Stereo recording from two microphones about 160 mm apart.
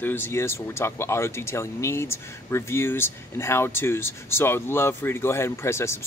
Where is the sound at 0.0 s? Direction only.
15° left (ahead or behind).